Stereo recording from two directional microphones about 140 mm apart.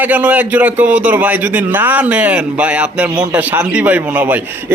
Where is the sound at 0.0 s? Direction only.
10° right (ahead or behind).